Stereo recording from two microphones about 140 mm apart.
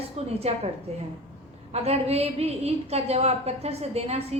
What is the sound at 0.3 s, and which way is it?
Speech, 50° right (ahead or behind).